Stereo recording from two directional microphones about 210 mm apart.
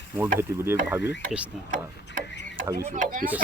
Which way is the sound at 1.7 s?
40° right (ahead or behind).